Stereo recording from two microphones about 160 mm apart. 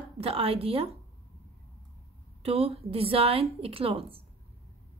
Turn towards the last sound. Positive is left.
turn(degrees=-35)  # may be behind; listen again after turning